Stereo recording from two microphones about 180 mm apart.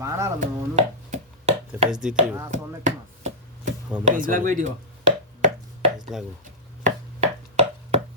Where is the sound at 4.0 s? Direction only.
45° right (ahead or behind).